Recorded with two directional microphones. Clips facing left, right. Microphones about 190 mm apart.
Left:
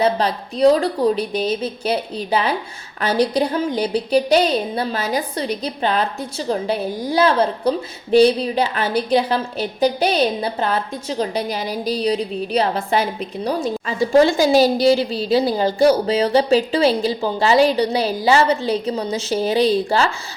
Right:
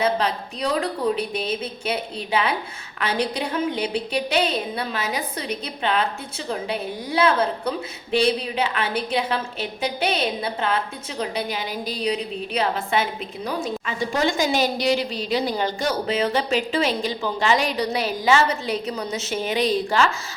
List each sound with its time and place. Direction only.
0.0 s a woman's voice: 35° left (ahead or behind)